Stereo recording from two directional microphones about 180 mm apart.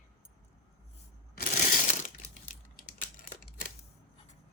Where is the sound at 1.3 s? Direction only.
45° left (ahead or behind).